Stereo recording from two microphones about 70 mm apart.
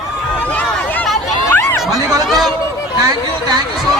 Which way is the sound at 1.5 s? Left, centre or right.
Left.